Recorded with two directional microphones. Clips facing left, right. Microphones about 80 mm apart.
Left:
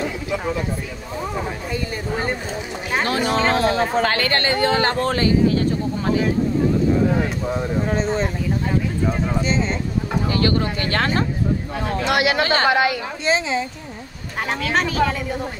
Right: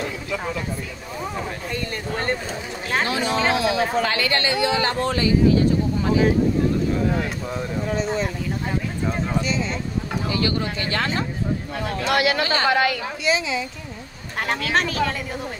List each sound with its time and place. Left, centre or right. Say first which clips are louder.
1.7 s speech: left 2 dB; centre
3.1 s speech: left 4 dB; left
7.5 s speech: left 2 dB; left
9.4 s speech: left 3 dB; left
12.1 s speech: left 2 dB; left
13.2 s speech: left 3 dB; left
14.5 s a woman's voice: left 1 dB; centre